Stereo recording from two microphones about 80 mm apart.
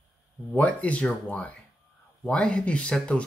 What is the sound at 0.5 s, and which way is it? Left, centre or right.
Speech, centre.